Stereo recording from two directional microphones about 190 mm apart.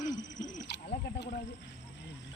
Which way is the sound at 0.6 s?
65° left (ahead or behind).